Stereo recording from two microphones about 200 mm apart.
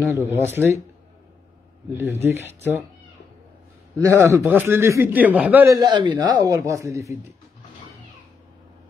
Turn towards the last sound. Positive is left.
turn(degrees=-15)  # may be behind; listen again after turning